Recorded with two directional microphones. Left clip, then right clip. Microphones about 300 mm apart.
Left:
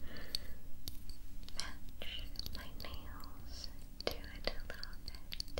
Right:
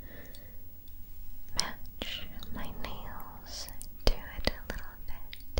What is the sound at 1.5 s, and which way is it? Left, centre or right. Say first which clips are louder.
Whispering: right 12 dB; right.